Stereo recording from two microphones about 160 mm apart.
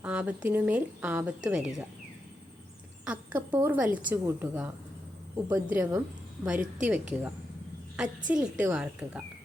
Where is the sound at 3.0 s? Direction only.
10° right (ahead or behind).